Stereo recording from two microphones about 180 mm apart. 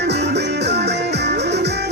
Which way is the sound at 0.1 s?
70° right (ahead or behind).